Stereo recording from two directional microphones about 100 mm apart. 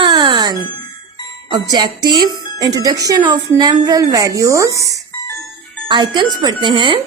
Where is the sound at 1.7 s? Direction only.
45° right (ahead or behind).